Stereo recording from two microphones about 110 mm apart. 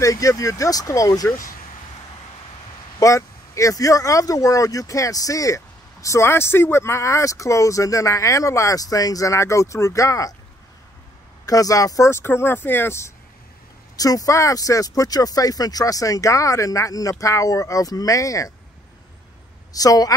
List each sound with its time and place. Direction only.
0.0 s speech: 30° left (ahead or behind)
3.0 s speech: 30° left (ahead or behind)
11.4 s speech: 30° left (ahead or behind)
13.9 s speech: 35° left (ahead or behind)
19.7 s speech: 35° left (ahead or behind)